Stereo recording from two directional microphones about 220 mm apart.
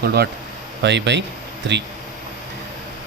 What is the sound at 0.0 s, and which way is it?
Speech, 45° right (ahead or behind).